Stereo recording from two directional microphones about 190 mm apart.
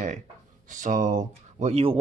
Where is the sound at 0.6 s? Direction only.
40° right (ahead or behind).